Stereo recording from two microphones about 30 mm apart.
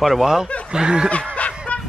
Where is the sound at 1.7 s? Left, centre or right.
Left.